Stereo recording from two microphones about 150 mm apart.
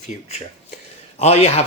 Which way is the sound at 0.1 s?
45° left (ahead or behind).